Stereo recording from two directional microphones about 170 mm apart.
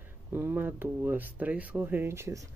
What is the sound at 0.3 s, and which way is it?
Speech, 10° right (ahead or behind).